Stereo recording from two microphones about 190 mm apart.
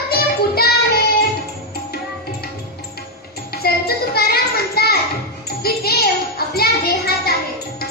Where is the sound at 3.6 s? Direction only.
55° left (ahead or behind).